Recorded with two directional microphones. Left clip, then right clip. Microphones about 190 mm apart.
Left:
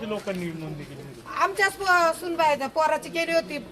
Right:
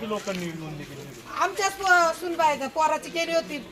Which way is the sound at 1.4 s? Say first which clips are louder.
Left 2 dB; 15° left (ahead or behind).